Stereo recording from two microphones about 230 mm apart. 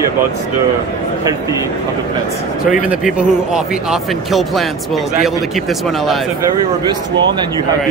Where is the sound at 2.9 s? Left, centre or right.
Centre.